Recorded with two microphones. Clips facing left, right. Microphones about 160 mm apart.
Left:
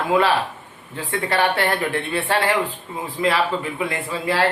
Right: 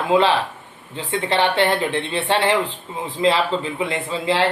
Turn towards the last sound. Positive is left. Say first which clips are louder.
# right 1 dB
turn(degrees=-20)  # may be behind; listen again after turning